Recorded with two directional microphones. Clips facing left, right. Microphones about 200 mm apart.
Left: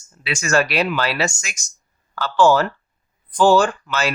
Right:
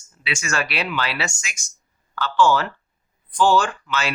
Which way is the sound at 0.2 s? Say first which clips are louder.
Left 7 dB; 45° left (ahead or behind).